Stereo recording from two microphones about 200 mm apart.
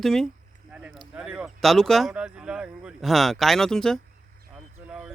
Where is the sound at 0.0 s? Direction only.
Centre (ahead or behind).